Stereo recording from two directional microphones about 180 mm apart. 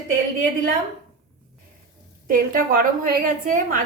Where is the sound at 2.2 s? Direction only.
50° right (ahead or behind).